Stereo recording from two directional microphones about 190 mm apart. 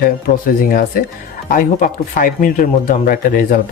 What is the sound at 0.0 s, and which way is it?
Speech, 50° left (ahead or behind).